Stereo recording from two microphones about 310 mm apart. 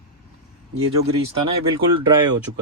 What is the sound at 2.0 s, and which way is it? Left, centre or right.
Speech, centre.